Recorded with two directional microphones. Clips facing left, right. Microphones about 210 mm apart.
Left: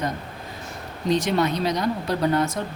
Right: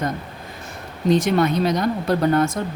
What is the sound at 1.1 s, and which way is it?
Speech, 50° right (ahead or behind).